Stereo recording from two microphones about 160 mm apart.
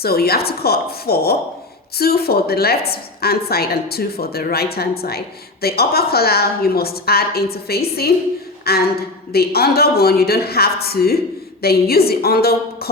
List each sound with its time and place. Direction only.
0.0 s a woman's voice: 75° left (ahead or behind)